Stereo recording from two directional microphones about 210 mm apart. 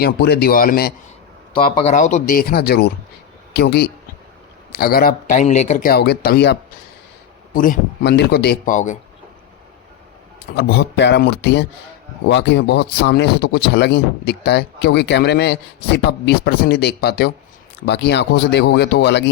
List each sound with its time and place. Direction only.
0.0 s speech: 50° left (ahead or behind)
1.5 s speech: 30° left (ahead or behind); by 6.6 s 50° left (ahead or behind)
7.5 s speech: 40° left (ahead or behind)
8.7 s speech: 35° left (ahead or behind)
10.6 s speech: 50° left (ahead or behind)